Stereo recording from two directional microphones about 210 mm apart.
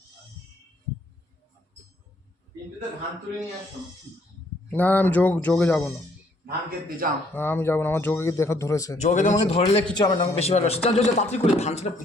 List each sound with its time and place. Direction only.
4.7 s a man's voice: 10° left (ahead or behind)
6.4 s a man's voice: 45° right (ahead or behind)
7.3 s a man's voice: 10° left (ahead or behind)
9.0 s a man's voice: 35° left (ahead or behind)